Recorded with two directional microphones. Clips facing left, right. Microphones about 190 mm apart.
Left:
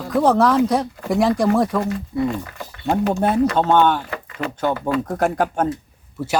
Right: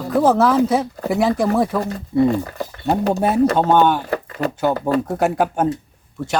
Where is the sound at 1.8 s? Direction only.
35° right (ahead or behind).